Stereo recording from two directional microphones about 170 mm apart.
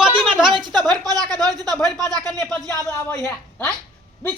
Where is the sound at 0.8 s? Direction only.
20° right (ahead or behind).